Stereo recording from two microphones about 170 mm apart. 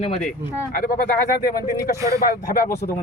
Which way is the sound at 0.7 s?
60° left (ahead or behind).